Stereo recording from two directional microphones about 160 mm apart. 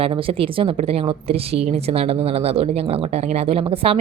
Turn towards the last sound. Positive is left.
turn(degrees=-35)  # may be behind; listen again after turning